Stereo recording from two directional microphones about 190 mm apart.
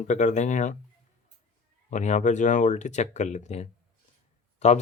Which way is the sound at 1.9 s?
40° left (ahead or behind).